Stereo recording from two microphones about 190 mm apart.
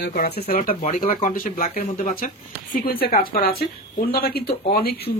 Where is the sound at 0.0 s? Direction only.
55° left (ahead or behind).